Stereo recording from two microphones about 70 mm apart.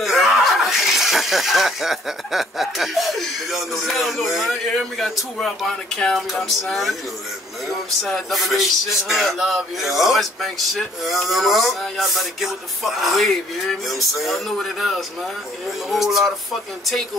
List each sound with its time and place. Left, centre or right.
0.0 s speech: centre
8.0 s speech: centre